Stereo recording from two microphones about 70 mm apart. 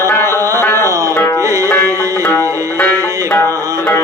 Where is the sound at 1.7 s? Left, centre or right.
Left.